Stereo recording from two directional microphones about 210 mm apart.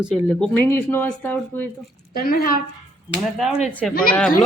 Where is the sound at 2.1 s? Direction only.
45° left (ahead or behind).